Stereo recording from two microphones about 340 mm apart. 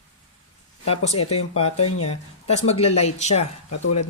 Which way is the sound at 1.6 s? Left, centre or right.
Centre.